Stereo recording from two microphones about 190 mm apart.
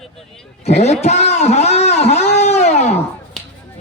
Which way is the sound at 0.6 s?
35° left (ahead or behind).